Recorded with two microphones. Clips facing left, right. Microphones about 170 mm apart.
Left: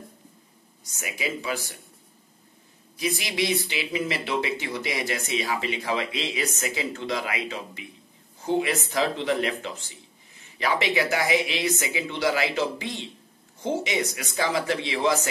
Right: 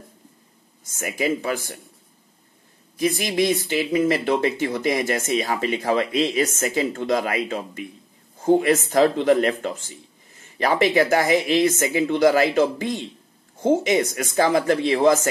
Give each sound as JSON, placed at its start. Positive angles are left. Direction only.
{"t": 0.9, "sound": "speech", "side_deg": -50}
{"t": 3.0, "sound": "speech", "side_deg": -50}